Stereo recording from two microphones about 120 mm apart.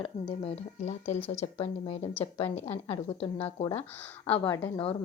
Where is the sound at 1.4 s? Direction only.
60° left (ahead or behind).